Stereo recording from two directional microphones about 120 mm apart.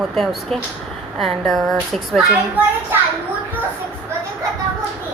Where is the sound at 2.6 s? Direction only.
15° right (ahead or behind).